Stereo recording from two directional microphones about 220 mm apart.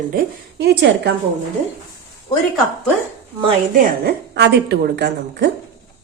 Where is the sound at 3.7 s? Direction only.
45° right (ahead or behind).